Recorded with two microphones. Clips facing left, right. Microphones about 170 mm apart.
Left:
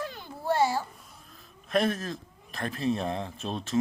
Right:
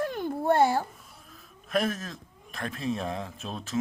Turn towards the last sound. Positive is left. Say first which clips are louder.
# left 3 dB
turn(degrees=0)  # may be behind; listen again after turning